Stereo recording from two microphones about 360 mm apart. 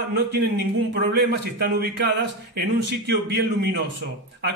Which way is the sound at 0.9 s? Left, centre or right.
Right.